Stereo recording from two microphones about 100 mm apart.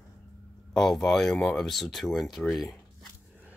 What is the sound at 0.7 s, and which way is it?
Speech, 5° left (ahead or behind).